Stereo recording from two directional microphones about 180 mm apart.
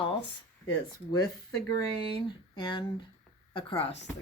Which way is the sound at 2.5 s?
25° left (ahead or behind).